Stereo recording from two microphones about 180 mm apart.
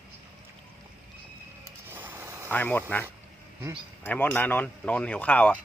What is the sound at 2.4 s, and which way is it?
Speech, 10° left (ahead or behind).